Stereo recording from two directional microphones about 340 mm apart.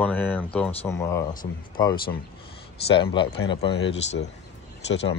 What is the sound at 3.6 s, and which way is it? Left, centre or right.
Speech, left.